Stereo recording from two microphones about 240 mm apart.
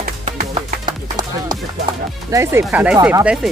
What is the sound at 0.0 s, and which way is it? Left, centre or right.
Music, right.